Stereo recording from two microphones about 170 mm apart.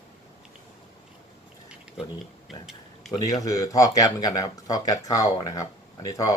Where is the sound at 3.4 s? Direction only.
20° left (ahead or behind).